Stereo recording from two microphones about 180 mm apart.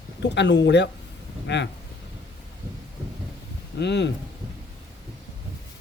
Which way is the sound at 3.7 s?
75° left (ahead or behind).